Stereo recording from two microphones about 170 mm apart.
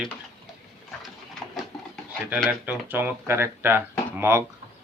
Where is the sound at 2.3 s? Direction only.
5° right (ahead or behind).